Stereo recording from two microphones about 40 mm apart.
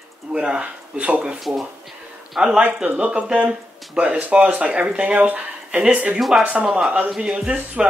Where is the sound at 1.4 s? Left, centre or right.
Centre.